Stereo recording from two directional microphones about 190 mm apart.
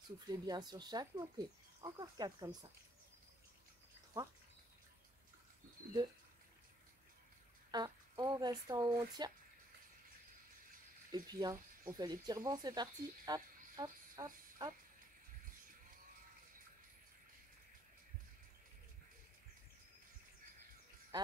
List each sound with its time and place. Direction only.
0.3 s speech: 20° right (ahead or behind)
7.7 s speech: 20° right (ahead or behind)
11.1 s speech: 20° right (ahead or behind)
21.1 s a sound: 20° right (ahead or behind)